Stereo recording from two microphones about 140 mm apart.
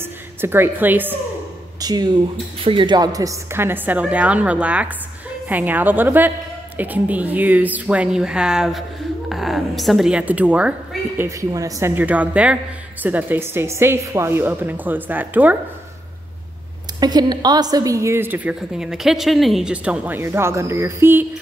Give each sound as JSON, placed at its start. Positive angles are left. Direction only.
{"t": 0.0, "sound": "a woman's voice", "side_deg": -15}
{"t": 1.8, "sound": "a woman's voice", "side_deg": -30}
{"t": 11.2, "sound": "a woman's voice", "side_deg": -25}
{"t": 17.0, "sound": "a woman's voice", "side_deg": -30}